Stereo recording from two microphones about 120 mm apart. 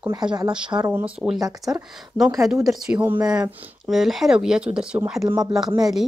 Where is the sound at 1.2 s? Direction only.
15° right (ahead or behind).